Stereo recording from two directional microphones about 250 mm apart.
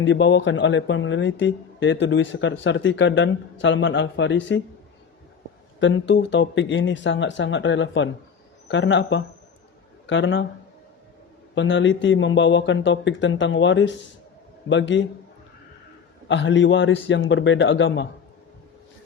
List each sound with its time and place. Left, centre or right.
0.0 s speech: left
5.8 s speech: left
11.5 s speech: left
16.3 s speech: left